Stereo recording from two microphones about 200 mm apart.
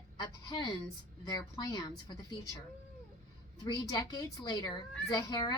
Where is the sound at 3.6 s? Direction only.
20° left (ahead or behind).